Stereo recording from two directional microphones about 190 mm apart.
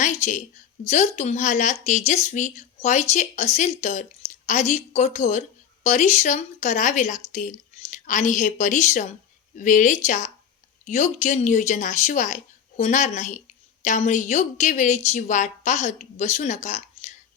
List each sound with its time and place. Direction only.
0.0 s a woman's voice: 40° left (ahead or behind)